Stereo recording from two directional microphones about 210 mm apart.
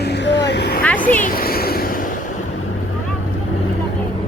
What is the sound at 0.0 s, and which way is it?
Boat, 55° left (ahead or behind).